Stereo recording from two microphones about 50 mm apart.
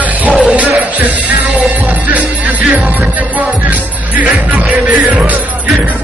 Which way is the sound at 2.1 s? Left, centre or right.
Right.